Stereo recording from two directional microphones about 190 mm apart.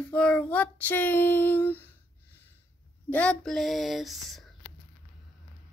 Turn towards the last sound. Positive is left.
turn(degrees=0)  # may be behind; listen again after turning